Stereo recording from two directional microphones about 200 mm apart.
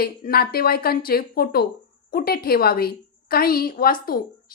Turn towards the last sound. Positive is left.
turn(degrees=45)  # may be behind; listen again after turning